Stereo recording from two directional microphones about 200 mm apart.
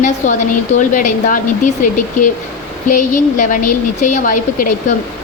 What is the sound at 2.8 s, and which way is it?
Speech, 40° left (ahead or behind).